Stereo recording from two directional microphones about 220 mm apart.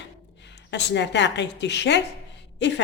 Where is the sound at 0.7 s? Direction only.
55° left (ahead or behind).